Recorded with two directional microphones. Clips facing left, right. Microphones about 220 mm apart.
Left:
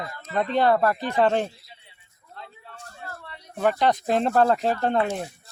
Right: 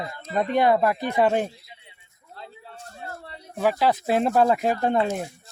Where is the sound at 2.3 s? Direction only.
30° right (ahead or behind).